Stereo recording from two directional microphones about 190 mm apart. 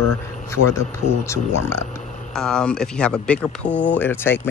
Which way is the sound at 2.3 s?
5° left (ahead or behind).